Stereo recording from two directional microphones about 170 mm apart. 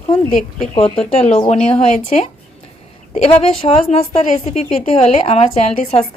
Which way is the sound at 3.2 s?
35° left (ahead or behind).